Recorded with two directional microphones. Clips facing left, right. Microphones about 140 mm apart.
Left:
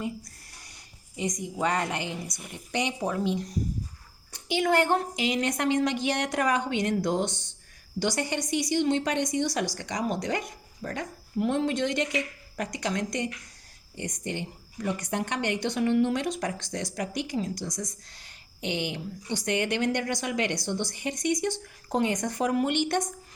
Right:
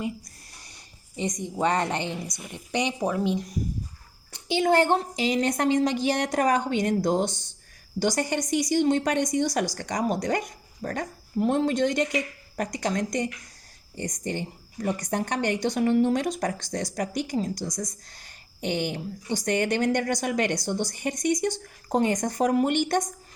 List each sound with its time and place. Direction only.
1.5 s a woman's voice: 25° right (ahead or behind)
4.4 s a woman's voice: 30° right (ahead or behind)